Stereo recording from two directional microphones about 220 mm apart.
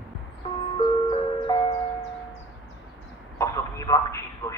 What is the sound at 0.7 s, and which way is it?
Ice cream truck, 20° left (ahead or behind).